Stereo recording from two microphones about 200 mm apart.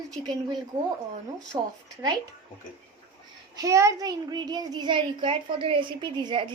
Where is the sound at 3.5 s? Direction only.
15° right (ahead or behind).